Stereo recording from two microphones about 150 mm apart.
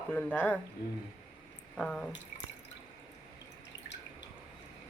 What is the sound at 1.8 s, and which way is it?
Speech, 5° left (ahead or behind).